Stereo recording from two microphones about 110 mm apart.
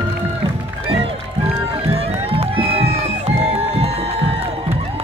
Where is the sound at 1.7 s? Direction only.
60° right (ahead or behind).